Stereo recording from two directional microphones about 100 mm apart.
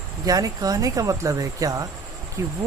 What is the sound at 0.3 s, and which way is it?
Speech, 35° right (ahead or behind).